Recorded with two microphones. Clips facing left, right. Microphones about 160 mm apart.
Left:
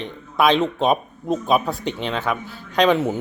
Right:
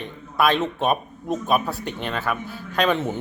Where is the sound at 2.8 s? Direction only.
10° left (ahead or behind).